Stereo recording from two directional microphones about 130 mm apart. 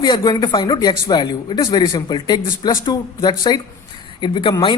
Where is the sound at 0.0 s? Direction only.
35° left (ahead or behind).